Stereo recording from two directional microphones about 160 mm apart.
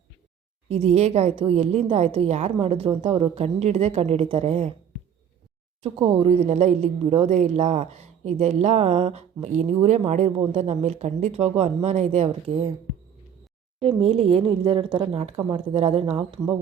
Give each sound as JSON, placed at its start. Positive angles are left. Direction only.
{"t": 0.7, "sound": "a woman's voice", "side_deg": -40}
{"t": 5.8, "sound": "speech", "side_deg": -40}
{"t": 13.8, "sound": "a woman's voice", "side_deg": -35}